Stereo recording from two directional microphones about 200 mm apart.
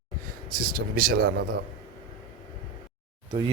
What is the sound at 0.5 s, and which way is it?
Speech, 45° right (ahead or behind).